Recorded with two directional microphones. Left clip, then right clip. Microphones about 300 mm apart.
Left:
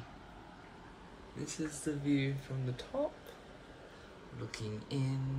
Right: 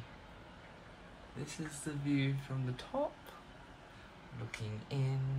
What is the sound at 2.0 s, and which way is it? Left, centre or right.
Speech, right.